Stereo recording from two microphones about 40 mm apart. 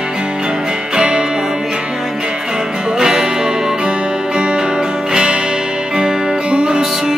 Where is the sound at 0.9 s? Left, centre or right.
Centre.